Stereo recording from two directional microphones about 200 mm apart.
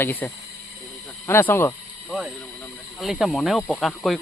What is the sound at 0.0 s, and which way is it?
Speech, 10° left (ahead or behind).